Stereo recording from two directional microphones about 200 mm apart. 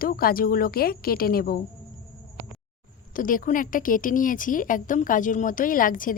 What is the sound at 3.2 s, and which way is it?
Speech, 45° left (ahead or behind).